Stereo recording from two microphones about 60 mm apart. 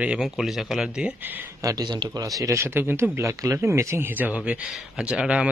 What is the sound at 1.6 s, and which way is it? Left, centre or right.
Speech, right.